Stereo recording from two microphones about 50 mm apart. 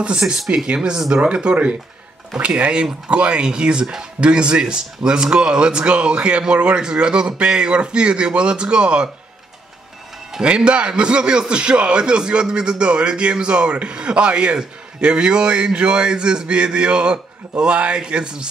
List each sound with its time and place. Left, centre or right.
0.0 s a man's voice: centre
10.4 s a man's voice: right